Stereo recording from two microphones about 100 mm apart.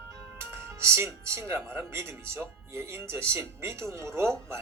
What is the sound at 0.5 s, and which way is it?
Speech, 25° right (ahead or behind).